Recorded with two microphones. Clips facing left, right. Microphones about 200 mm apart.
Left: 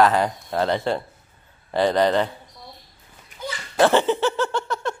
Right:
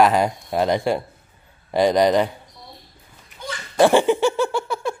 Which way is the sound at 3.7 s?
10° right (ahead or behind).